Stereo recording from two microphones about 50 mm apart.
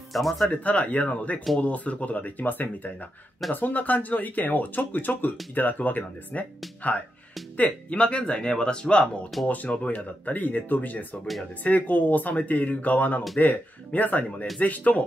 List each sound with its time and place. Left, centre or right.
0.1 s speech: centre
0.5 s speech: left
9.5 s speech: left